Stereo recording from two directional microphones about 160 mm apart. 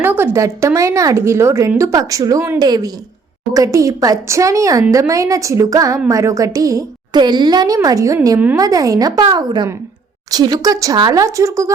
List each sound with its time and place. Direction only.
0.0 s speech: 15° right (ahead or behind)